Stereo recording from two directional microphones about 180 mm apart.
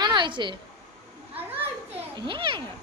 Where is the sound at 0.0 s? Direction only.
25° right (ahead or behind).